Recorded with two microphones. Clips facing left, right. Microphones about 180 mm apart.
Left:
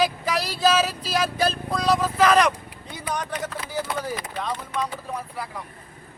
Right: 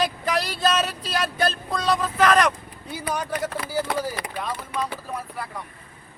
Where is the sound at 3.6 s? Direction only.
60° right (ahead or behind).